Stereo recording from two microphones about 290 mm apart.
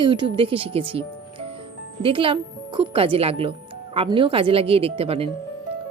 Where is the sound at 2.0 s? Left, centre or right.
Centre.